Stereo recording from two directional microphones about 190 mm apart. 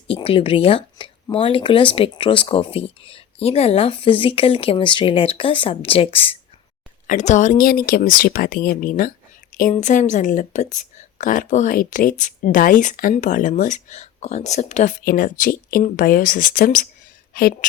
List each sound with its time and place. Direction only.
0.1 s a woman's voice: 30° left (ahead or behind); by 17.7 s 50° left (ahead or behind)